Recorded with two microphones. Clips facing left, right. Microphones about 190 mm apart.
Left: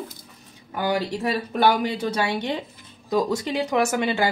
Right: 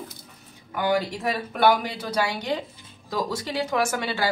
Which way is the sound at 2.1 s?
25° left (ahead or behind).